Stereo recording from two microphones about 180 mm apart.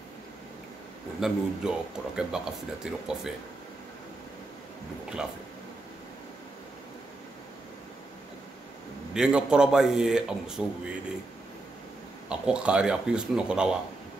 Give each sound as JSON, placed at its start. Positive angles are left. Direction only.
{"t": 1.2, "sound": "speech", "side_deg": -5}
{"t": 9.1, "sound": "speech", "side_deg": -5}
{"t": 12.3, "sound": "speech", "side_deg": -5}